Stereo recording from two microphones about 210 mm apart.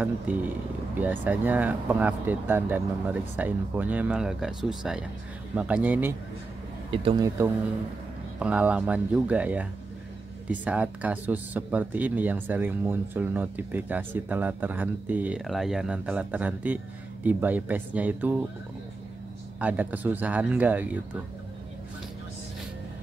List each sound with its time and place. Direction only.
0.3 s speech: 10° right (ahead or behind)
6.9 s speech: 25° right (ahead or behind); by 18.4 s 5° right (ahead or behind)
19.6 s speech: 5° right (ahead or behind)